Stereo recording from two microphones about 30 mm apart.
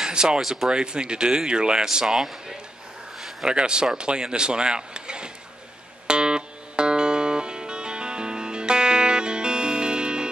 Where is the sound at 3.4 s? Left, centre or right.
Right.